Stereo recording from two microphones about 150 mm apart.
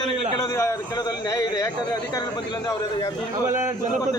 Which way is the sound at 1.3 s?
20° left (ahead or behind).